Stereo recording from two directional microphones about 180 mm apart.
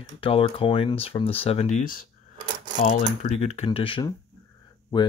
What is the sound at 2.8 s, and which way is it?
Speech, 40° left (ahead or behind).